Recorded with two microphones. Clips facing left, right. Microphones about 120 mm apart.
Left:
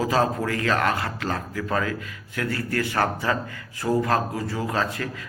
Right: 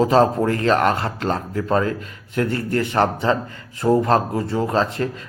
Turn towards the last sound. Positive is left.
turn(degrees=-30)  # may be behind; listen again after turning